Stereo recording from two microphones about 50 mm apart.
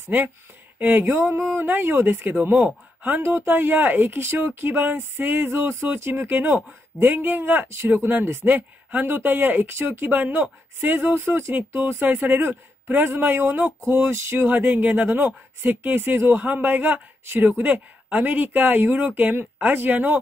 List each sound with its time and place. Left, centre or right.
0.7 s speech: right
1.5 s a man's voice: right
3.2 s speech: right
3.4 s a man's voice: right
6.3 s a man's voice: right
7.6 s speech: right
7.9 s a man's voice: right
10.0 s a man's voice: right
11.1 s speech: right
11.5 s a man's voice: right
14.5 s a man's voice: right
16.3 s a man's voice: right